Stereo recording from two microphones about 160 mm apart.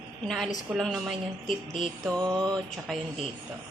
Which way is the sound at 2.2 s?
25° right (ahead or behind).